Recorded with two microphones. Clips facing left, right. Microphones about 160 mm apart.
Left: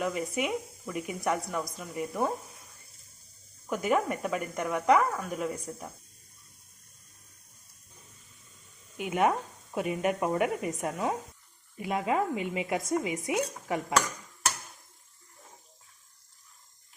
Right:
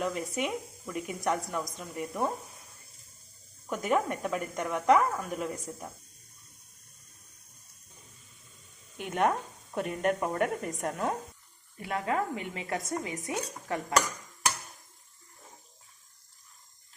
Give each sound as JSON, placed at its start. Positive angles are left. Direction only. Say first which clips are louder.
{"t": 0.0, "sound": "speech", "louder": "left 1 dB", "side_deg": 5}
{"t": 3.7, "sound": "speech", "louder": "left 1 dB", "side_deg": 0}
{"t": 9.0, "sound": "speech", "louder": "left 1 dB", "side_deg": 5}
{"t": 11.8, "sound": "a woman's voice", "louder": "left 2 dB", "side_deg": 15}